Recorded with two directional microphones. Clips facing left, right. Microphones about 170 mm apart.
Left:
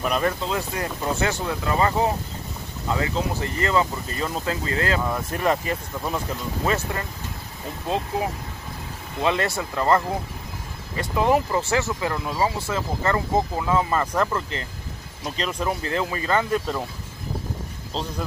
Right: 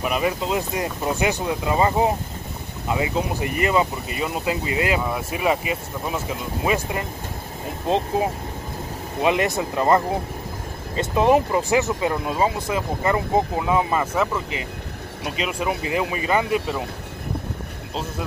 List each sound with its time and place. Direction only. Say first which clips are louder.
0.0 s speech: even; 5° right (ahead or behind)
0.5 s speech: right 3 dB; 20° right (ahead or behind)
8.2 s speech: right 4 dB; 25° right (ahead or behind); by 16.8 s 5° right (ahead or behind)